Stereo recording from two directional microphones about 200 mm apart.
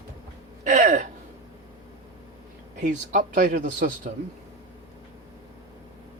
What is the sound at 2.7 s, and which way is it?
A man's voice, 40° right (ahead or behind).